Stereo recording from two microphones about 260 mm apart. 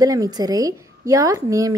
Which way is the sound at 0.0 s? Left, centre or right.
Centre.